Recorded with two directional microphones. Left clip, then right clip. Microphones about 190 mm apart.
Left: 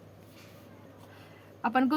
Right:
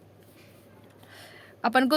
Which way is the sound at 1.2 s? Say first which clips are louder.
Right 4 dB; 65° right (ahead or behind).